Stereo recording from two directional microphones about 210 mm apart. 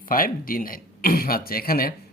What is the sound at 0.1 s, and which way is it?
Speech, 40° left (ahead or behind).